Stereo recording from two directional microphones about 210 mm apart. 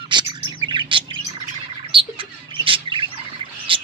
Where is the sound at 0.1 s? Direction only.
20° right (ahead or behind).